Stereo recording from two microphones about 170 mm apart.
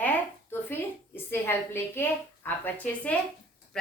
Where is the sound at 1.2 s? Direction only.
15° left (ahead or behind).